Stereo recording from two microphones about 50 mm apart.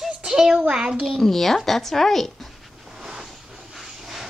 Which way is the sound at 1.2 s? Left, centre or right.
Centre.